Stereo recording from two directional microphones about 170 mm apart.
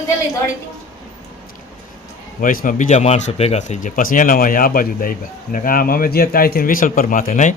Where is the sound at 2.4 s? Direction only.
55° left (ahead or behind).